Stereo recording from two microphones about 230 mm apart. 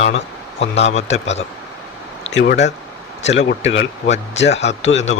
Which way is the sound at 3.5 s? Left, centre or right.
Left.